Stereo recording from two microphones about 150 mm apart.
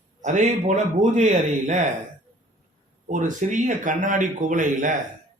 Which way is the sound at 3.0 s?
55° right (ahead or behind).